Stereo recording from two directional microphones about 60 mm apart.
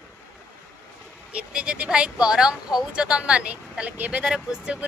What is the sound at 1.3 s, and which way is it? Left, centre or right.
Speech, right.